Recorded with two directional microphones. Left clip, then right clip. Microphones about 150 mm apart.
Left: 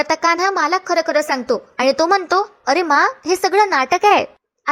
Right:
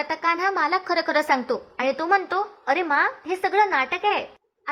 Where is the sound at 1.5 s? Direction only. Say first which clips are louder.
Left 8 dB; 35° left (ahead or behind).